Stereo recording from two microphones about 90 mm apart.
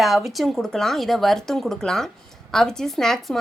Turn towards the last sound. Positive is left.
turn(degrees=5)  # may be behind; listen again after turning